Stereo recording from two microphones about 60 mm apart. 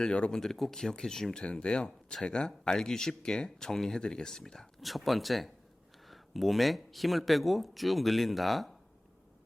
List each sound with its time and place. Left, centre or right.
0.0 s speech: centre